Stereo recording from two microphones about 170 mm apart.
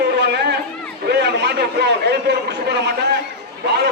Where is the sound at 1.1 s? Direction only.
80° right.